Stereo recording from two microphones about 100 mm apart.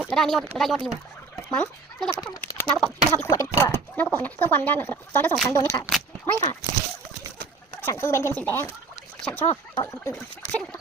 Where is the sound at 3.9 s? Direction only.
15° left (ahead or behind).